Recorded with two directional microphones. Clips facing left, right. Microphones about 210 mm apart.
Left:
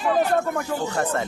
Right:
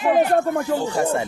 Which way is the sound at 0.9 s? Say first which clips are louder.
Right 3 dB; 10° right (ahead or behind).